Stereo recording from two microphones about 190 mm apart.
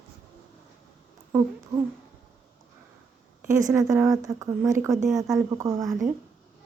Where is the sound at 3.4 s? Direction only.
15° right (ahead or behind).